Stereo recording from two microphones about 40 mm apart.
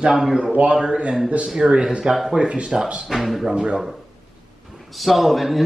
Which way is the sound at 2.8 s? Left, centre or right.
Centre.